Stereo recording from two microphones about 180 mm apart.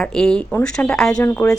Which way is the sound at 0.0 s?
5° left (ahead or behind).